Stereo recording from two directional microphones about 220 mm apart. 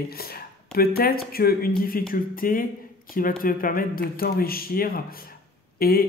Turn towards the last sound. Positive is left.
turn(degrees=45)  # may be behind; listen again after turning